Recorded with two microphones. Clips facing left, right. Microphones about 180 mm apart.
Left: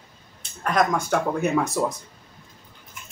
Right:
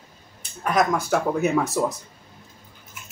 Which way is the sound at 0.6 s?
5° right (ahead or behind).